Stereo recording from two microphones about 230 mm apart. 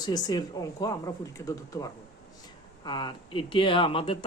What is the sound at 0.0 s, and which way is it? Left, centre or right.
A man's voice, centre.